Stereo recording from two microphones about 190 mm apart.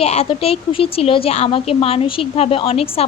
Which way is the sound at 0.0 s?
35° left (ahead or behind).